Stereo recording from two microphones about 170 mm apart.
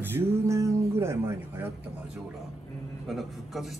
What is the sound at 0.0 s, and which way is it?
Speech, 15° right (ahead or behind).